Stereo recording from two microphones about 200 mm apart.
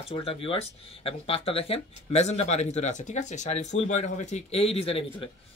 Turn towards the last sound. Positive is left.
turn(degrees=30)  # may be behind; listen again after turning